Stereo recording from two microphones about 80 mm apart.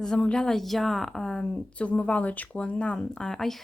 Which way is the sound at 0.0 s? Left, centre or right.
Centre.